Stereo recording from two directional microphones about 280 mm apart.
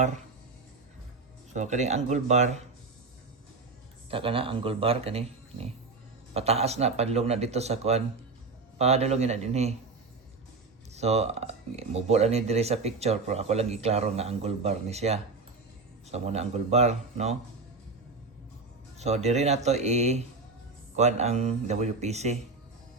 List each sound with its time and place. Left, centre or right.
1.5 s speech: right
4.1 s speech: centre
10.9 s speech: right
18.9 s speech: right